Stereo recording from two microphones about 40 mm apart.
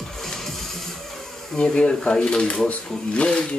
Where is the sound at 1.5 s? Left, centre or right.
Left.